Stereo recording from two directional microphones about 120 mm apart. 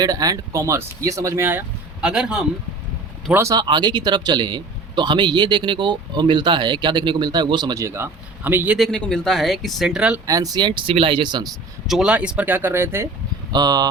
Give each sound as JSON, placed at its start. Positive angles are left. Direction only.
{"t": 0.0, "sound": "speech", "side_deg": -30}
{"t": 2.0, "sound": "speech", "side_deg": -5}
{"t": 3.5, "sound": "speech", "side_deg": -35}
{"t": 8.8, "sound": "speech", "side_deg": 5}
{"t": 10.2, "sound": "speech", "side_deg": -30}
{"t": 11.9, "sound": "speech", "side_deg": -5}
{"t": 13.5, "sound": "speech", "side_deg": -35}